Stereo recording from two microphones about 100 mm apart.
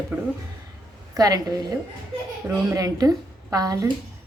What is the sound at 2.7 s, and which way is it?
A woman's voice, 35° right (ahead or behind).